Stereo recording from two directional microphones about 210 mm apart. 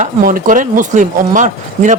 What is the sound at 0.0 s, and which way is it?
Speech, 40° right (ahead or behind).